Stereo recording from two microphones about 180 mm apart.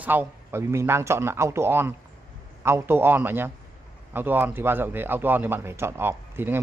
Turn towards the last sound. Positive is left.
turn(degrees=-10)  # may be behind; listen again after turning